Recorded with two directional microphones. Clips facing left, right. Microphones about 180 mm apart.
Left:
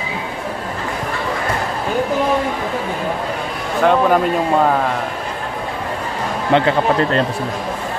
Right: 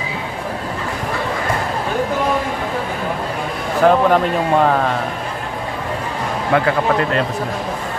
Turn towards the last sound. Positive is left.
turn(degrees=25)  # may be behind; listen again after turning